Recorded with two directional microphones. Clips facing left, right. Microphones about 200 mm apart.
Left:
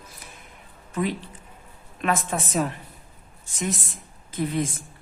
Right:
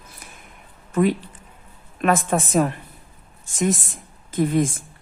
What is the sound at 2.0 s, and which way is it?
A woman's voice, 50° right (ahead or behind).